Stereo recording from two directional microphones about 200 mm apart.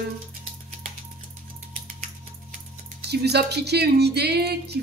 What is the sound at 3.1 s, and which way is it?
A woman's voice, 55° right (ahead or behind).